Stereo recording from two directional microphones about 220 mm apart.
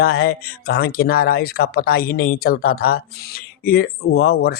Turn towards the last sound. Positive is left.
turn(degrees=45)  # may be behind; listen again after turning